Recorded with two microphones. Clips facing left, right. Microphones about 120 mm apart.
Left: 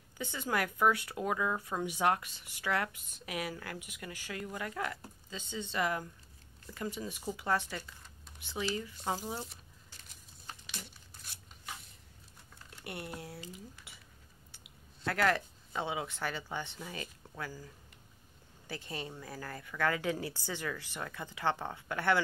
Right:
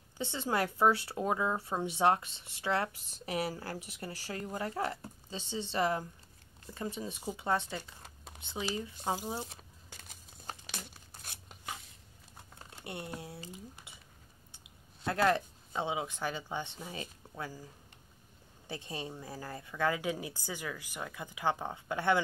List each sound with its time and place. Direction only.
0.2 s speech: 25° right (ahead or behind)
12.8 s speech: 25° right (ahead or behind)
13.9 s a sound: 20° right (ahead or behind)
15.0 s speech: 20° right (ahead or behind)
18.7 s speech: 20° right (ahead or behind)